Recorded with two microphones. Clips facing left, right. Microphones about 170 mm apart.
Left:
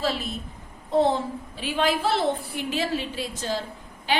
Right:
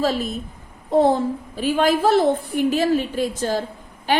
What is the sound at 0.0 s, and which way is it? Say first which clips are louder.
A woman's voice: right 6 dB; 45° right (ahead or behind).